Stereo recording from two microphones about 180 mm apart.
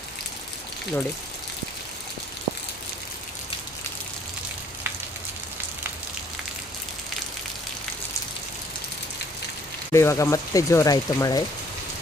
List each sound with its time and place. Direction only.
9.9 s speech: 15° left (ahead or behind)